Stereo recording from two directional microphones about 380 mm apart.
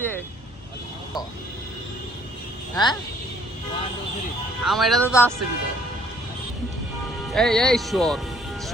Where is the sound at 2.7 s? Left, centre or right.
Centre.